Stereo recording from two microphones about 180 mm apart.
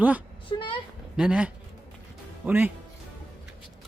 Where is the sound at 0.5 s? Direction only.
30° left (ahead or behind).